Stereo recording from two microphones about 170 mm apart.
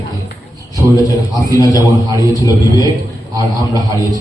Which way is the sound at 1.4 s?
20° left (ahead or behind).